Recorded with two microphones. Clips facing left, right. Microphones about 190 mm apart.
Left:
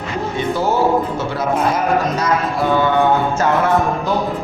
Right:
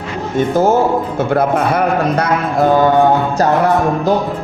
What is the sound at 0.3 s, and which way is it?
Speech, 45° right (ahead or behind).